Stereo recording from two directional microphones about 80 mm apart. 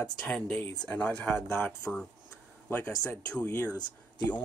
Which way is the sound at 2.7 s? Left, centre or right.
Left.